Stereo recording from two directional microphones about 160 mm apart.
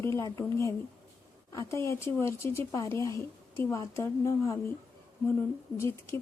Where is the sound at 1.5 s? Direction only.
15° left (ahead or behind).